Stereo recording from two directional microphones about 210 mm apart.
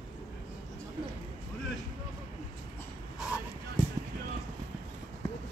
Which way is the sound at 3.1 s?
5° right (ahead or behind).